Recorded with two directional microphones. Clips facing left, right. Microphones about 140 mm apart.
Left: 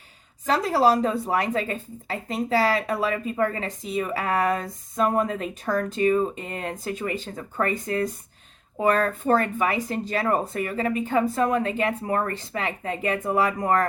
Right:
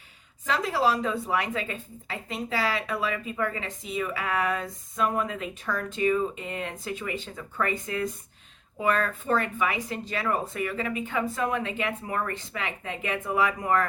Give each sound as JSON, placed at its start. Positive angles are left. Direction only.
{"t": 0.4, "sound": "a woman's voice", "side_deg": 40}